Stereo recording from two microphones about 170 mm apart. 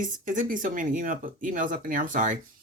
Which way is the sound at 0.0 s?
50° right (ahead or behind).